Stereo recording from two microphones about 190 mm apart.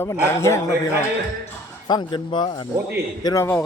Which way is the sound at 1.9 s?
25° left (ahead or behind).